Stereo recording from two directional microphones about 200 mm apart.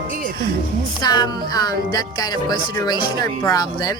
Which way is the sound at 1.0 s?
20° left (ahead or behind).